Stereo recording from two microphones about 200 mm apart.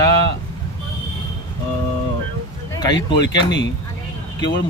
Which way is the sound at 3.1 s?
60° left (ahead or behind).